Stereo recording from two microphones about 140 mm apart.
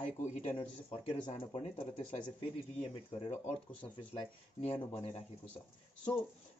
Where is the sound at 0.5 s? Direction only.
40° left (ahead or behind).